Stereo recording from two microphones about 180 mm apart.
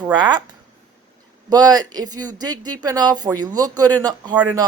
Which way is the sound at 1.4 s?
20° right (ahead or behind).